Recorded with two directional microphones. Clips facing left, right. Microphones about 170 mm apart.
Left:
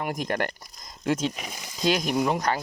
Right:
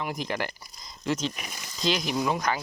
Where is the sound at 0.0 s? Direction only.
50° left (ahead or behind).